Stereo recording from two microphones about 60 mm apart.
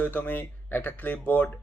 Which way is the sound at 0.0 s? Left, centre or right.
Left.